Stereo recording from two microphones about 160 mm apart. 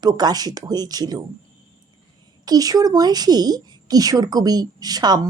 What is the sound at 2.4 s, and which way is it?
Speech, 25° right (ahead or behind).